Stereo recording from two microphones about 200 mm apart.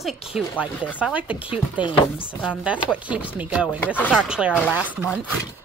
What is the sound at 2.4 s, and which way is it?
Speech, 5° right (ahead or behind).